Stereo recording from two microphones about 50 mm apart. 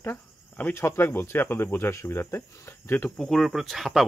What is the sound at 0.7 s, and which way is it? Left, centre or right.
Speech, left.